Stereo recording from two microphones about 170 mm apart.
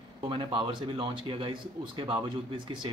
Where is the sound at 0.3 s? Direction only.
30° right (ahead or behind).